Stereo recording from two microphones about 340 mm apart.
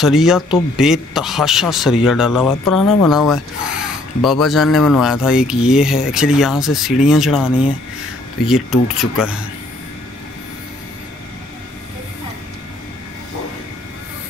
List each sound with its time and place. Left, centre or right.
0.0 s speech: centre